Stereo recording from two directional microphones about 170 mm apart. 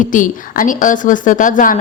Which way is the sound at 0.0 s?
50° left (ahead or behind).